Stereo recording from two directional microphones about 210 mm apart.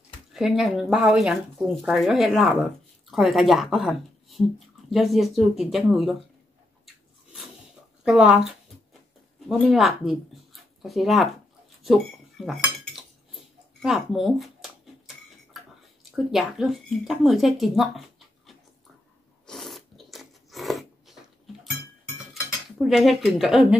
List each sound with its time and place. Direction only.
0.3 s speech: centre (ahead or behind)
8.0 s speech: 5° right (ahead or behind)
12.6 s dishes: centre (ahead or behind)
16.0 s speech: centre (ahead or behind)
19.4 s a sound: centre (ahead or behind)
22.3 s cutlery: centre (ahead or behind)